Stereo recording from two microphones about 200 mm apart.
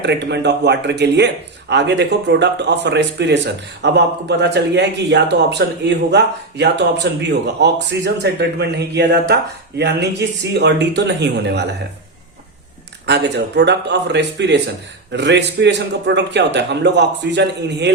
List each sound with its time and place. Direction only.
0.0 s speech: 60° right (ahead or behind)
13.1 s speech: 60° right (ahead or behind)